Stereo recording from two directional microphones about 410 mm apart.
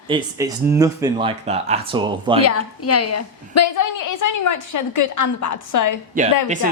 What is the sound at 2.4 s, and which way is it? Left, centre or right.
A woman's voice, left.